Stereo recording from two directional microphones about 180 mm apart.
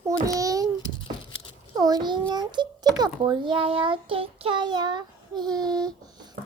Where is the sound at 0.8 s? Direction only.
25° left (ahead or behind).